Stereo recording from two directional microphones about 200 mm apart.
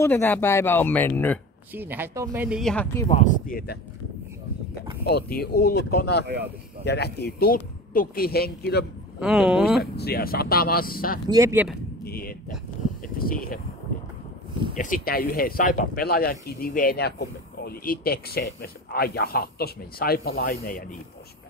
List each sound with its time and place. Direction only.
0.0 s speech: 10° left (ahead or behind)
1.7 s speech: 10° right (ahead or behind)
2.6 s speech: 5° left (ahead or behind)
3.1 s speech: 40° left (ahead or behind)
5.0 s speech: 50° left (ahead or behind)
9.2 s speech: 5° right (ahead or behind)
9.9 s speech: 50° left (ahead or behind)
11.2 s speech: 15° right (ahead or behind)
12.0 s a sound: 50° left (ahead or behind)
13.2 s speech: 45° left (ahead or behind)
14.8 s speech: 45° left (ahead or behind)